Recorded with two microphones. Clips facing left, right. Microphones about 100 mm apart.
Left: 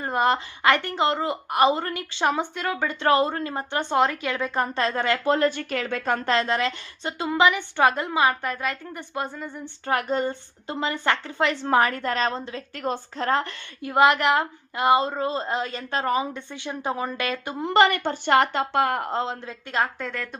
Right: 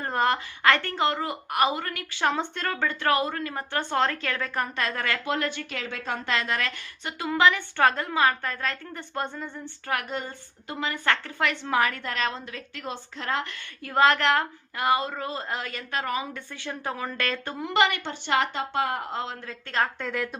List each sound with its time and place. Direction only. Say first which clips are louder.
0.0 s a woman's voice: left 3 dB; 15° left (ahead or behind); by 6.3 s 50° left (ahead or behind)
6.3 s a woman's voice: left 3 dB; 30° left (ahead or behind); by 9.5 s 5° left (ahead or behind)
9.8 s a woman's voice: left 7 dB; 30° left (ahead or behind)
11.6 s a woman's voice: left 6 dB; 35° left (ahead or behind)
12.7 s a woman's voice: left 8 dB; 45° left (ahead or behind)
13.8 s a woman's voice: left 2 dB; 15° left (ahead or behind); by 16.2 s 30° left (ahead or behind)
16.3 s a woman's voice: left 3 dB; 20° left (ahead or behind)
17.6 s speech: left 5 dB; 35° left (ahead or behind); by 19.0 s 60° left (ahead or behind)
19.1 s a woman's voice: left 5 dB; 30° left (ahead or behind)
19.5 s a woman's voice: left 1 dB; 10° left (ahead or behind)
20.0 s a woman's voice: right 2 dB; centre (ahead or behind)